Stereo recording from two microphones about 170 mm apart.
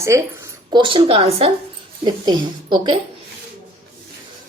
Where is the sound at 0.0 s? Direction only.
15° right (ahead or behind).